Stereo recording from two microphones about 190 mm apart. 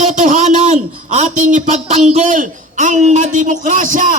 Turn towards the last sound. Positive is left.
turn(degrees=-45)  # may be behind; listen again after turning